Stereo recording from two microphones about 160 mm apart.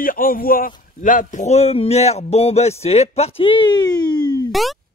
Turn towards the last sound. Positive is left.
turn(degrees=0)  # may be behind; listen again after turning